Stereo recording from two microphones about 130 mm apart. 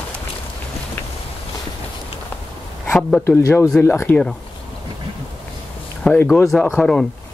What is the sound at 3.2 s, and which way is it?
Speech, 20° left (ahead or behind).